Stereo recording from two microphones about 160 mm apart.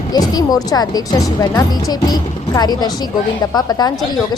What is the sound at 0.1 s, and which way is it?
A woman's voice, 25° left (ahead or behind).